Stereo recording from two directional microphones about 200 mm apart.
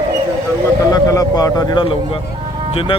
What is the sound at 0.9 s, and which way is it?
A man's voice, 15° left (ahead or behind).